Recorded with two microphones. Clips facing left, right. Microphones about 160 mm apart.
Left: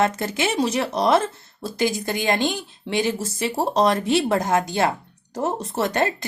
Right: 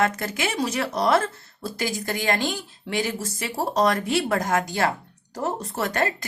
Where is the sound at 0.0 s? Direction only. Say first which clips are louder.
Left 3 dB; 25° left (ahead or behind).